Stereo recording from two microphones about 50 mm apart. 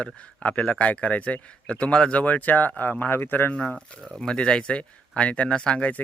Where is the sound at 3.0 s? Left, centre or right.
Left.